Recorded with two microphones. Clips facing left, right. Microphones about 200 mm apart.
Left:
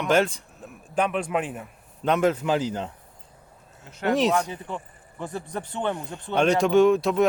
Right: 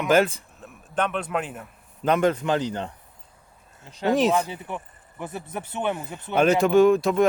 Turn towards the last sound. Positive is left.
turn(degrees=0)  # may be behind; listen again after turning